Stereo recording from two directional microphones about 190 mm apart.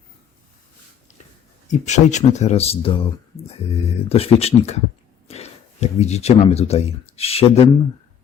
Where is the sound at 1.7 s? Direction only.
40° left (ahead or behind).